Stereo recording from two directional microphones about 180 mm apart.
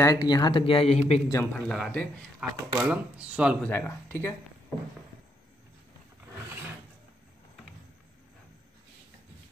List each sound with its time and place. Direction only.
0.0 s speech: 20° left (ahead or behind); by 1.2 s 35° left (ahead or behind)
1.3 s speech: 15° left (ahead or behind)
2.5 s speech: 15° right (ahead or behind)
3.6 s speech: 10° left (ahead or behind)